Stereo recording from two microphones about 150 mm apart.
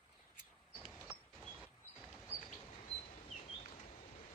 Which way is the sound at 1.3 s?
Centre (ahead or behind).